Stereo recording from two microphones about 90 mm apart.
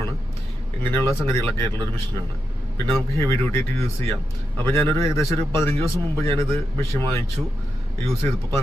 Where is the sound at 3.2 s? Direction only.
30° left (ahead or behind).